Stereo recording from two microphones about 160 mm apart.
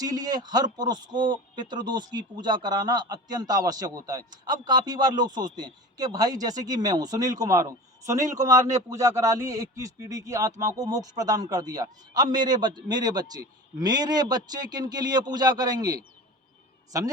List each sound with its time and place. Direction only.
0.0 s a man's voice: 25° right (ahead or behind)